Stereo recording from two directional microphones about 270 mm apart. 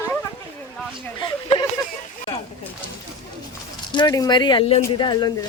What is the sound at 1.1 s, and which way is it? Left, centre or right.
Speech, centre.